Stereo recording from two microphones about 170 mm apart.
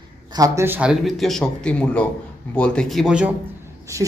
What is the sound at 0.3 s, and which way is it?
Speech, 20° right (ahead or behind).